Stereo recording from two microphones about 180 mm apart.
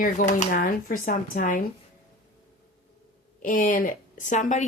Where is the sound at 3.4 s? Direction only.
50° left (ahead or behind).